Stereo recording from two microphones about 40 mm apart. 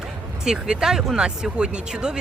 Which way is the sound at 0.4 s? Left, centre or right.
Centre.